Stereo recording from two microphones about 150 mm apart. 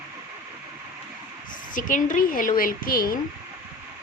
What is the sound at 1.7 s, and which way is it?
Speech, 65° left (ahead or behind).